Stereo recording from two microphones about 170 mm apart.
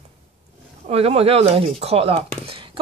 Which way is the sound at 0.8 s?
35° right (ahead or behind).